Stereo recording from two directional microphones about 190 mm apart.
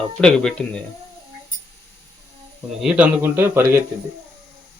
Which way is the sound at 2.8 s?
5° right (ahead or behind).